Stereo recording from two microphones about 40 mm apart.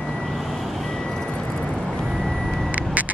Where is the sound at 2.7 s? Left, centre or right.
Right.